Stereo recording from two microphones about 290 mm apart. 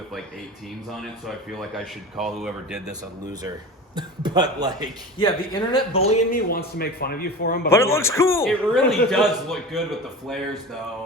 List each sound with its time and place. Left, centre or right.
0.9 s speech: centre
3.9 s a man's voice: centre
5.2 s speech: centre
6.3 s a man's voice: left
7.7 s a man's voice: centre